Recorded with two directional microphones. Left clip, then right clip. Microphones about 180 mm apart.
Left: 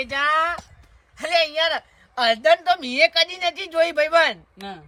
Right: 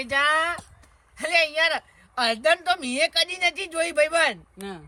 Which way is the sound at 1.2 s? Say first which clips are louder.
Left 1 dB; 10° left (ahead or behind).